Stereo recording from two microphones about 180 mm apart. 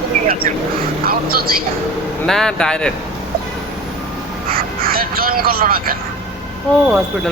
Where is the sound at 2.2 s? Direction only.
5° left (ahead or behind).